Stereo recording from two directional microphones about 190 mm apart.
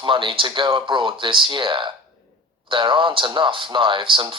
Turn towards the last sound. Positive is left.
turn(degrees=-25)  # may be behind; listen again after turning